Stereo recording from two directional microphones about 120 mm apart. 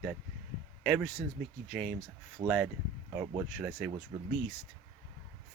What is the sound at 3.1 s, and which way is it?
Speech, 10° right (ahead or behind).